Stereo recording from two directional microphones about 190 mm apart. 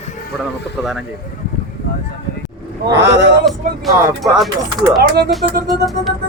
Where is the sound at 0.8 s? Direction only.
Centre (ahead or behind).